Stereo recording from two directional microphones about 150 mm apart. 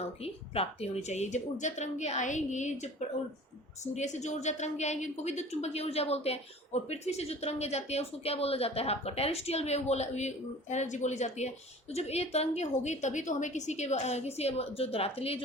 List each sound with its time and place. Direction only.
0.2 s speech: 40° left (ahead or behind)
3.9 s speech: 50° left (ahead or behind)